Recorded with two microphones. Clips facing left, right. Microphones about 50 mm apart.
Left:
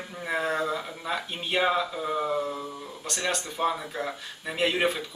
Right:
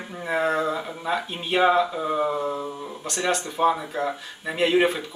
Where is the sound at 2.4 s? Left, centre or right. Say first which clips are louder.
Right 5 dB; centre.